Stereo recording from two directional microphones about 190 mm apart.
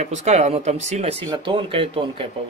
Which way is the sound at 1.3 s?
25° right (ahead or behind).